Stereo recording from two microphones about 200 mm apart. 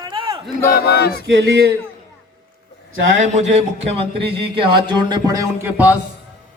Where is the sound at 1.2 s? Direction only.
55° right (ahead or behind).